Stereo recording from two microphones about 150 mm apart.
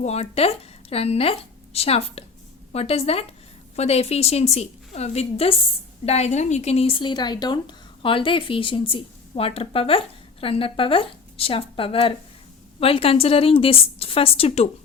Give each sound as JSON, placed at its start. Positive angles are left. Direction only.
{"t": 0.0, "sound": "a woman's voice", "side_deg": 45}